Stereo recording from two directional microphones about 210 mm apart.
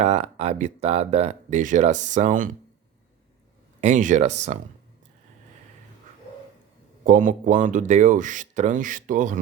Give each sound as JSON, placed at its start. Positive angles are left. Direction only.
{"t": 0.0, "sound": "speech", "side_deg": -30}
{"t": 3.8, "sound": "speech", "side_deg": -35}
{"t": 7.0, "sound": "speech", "side_deg": -40}